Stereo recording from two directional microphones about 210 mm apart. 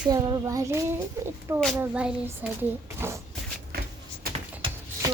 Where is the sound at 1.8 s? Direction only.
5° right (ahead or behind).